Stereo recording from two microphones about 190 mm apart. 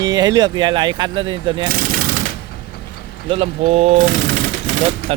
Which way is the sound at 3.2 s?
30° right (ahead or behind).